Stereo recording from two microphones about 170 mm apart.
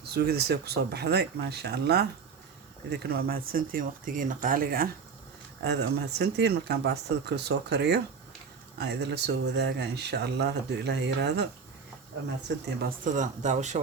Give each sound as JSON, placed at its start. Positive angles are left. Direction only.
{"t": 0.0, "sound": "speech", "side_deg": -70}
{"t": 5.6, "sound": "speech", "side_deg": -75}
{"t": 12.5, "sound": "speech", "side_deg": -90}
{"t": 13.1, "sound": "speech", "side_deg": -45}